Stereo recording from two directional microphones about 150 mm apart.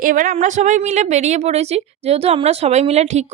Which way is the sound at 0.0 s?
60° right (ahead or behind).